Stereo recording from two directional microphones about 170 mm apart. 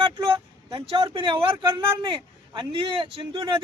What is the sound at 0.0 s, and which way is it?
Speech, 30° right (ahead or behind).